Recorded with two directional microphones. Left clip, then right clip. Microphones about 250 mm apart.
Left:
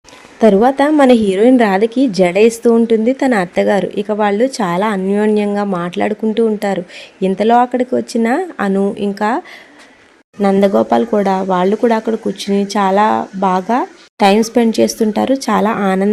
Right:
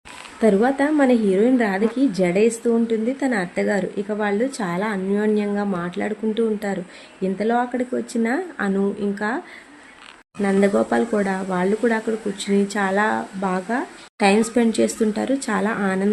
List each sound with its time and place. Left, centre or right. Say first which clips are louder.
0.3 s a woman's voice: left 8 dB; left
10.4 s a woman's voice: left 7 dB; left